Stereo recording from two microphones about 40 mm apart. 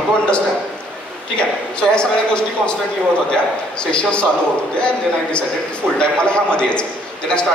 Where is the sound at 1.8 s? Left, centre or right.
Left.